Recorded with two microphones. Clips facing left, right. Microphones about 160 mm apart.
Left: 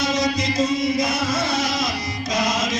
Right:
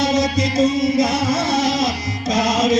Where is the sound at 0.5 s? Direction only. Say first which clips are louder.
Right 6 dB; 20° right (ahead or behind).